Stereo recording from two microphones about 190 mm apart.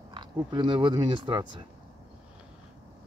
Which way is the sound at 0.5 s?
25° right (ahead or behind).